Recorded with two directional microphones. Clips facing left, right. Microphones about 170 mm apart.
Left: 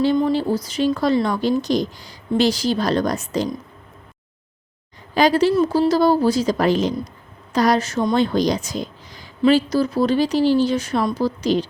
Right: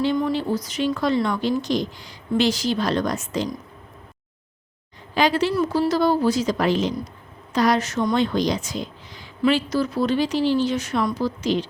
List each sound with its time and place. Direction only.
0.2 s speech: 30° left (ahead or behind)
5.1 s speech: 40° left (ahead or behind)
5.5 s speech: 30° left (ahead or behind)